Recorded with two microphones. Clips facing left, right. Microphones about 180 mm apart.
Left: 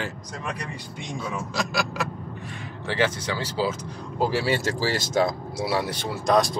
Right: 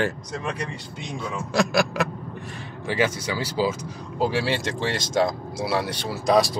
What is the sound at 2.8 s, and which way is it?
Speech, 10° right (ahead or behind).